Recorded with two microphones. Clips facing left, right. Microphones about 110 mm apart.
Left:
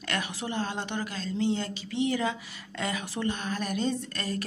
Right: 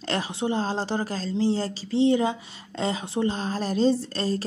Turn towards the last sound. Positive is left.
turn(degrees=-30)  # may be behind; listen again after turning